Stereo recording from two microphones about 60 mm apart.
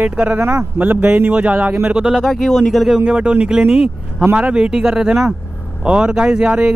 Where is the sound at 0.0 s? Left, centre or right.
Right.